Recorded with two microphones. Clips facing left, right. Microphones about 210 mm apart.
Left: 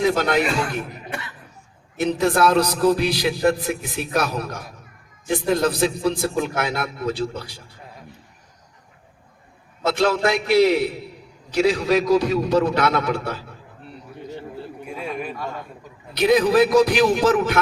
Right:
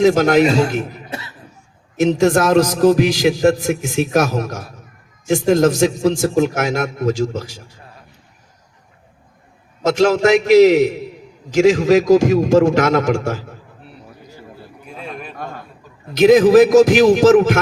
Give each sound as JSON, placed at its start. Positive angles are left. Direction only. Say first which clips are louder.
{"t": 0.0, "sound": "a man's voice", "louder": "right 7 dB", "side_deg": -45}
{"t": 2.0, "sound": "a man's voice", "louder": "right 5 dB", "side_deg": -45}
{"t": 9.8, "sound": "a man's voice", "louder": "right 6 dB", "side_deg": -45}
{"t": 16.1, "sound": "a man's voice", "louder": "right 7 dB", "side_deg": -45}